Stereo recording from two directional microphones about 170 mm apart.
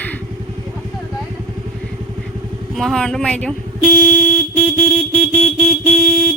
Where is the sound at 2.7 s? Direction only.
Centre (ahead or behind).